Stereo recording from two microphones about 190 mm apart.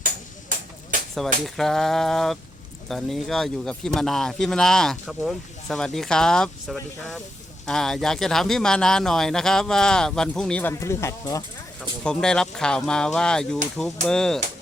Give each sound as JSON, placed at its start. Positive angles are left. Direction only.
{"t": 1.5, "sound": "speech", "side_deg": 0}
{"t": 12.0, "sound": "speech", "side_deg": 5}